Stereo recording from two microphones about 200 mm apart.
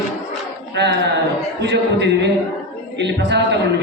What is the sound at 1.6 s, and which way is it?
A man's voice, 60° right (ahead or behind).